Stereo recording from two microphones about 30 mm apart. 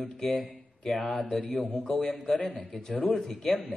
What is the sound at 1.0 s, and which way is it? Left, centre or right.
Speech, left.